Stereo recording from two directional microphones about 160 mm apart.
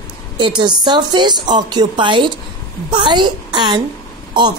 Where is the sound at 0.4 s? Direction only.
30° right (ahead or behind).